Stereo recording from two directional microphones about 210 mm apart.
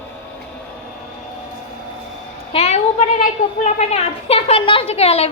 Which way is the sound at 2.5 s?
30° left (ahead or behind).